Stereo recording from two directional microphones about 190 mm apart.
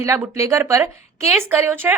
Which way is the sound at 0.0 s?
15° right (ahead or behind).